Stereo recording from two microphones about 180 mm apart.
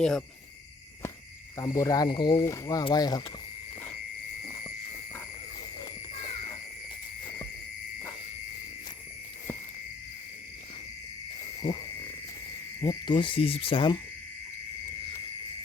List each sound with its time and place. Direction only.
0.0 s cricket: centre (ahead or behind)
1.5 s speech: 20° left (ahead or behind)
11.6 s speech: 25° left (ahead or behind)
12.8 s speech: 25° left (ahead or behind)